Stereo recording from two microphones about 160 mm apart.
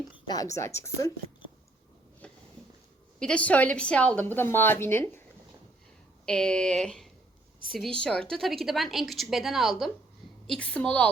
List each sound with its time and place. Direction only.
0.3 s a woman's voice: 20° left (ahead or behind)
2.2 s a sound: 10° left (ahead or behind)
3.2 s a woman's voice: 5° left (ahead or behind)
6.2 s a woman's voice: 5° left (ahead or behind)